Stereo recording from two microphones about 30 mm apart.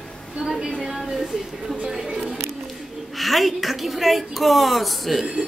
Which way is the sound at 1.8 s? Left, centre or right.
Centre.